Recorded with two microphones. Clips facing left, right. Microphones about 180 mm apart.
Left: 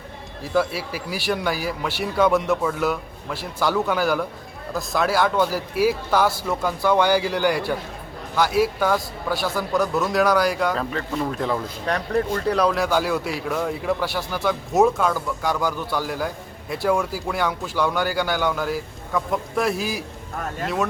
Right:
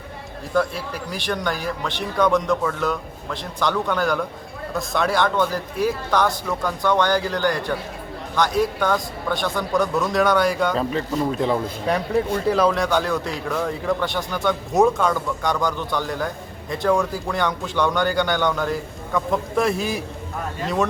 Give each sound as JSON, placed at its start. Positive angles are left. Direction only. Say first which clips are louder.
{"t": 0.5, "sound": "speech", "louder": "even", "side_deg": 5}
{"t": 11.3, "sound": "speech", "louder": "right 5 dB", "side_deg": -20}
{"t": 11.9, "sound": "speech", "louder": "right 1 dB", "side_deg": -5}